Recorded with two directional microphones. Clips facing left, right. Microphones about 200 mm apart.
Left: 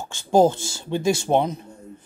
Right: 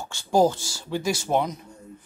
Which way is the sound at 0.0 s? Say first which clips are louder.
Left 3 dB; 20° left (ahead or behind).